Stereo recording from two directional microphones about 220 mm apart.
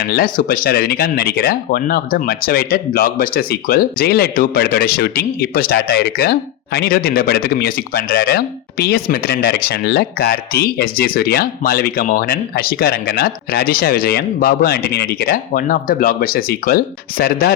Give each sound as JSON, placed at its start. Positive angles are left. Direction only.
{"t": 0.0, "sound": "speech", "side_deg": 45}